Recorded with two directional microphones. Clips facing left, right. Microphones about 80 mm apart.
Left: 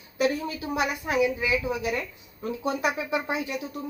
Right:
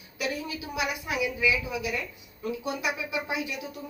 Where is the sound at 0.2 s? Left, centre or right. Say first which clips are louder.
Left 6 dB; left.